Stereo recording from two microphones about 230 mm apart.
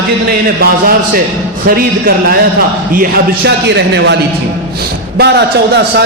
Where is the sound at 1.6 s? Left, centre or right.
Right.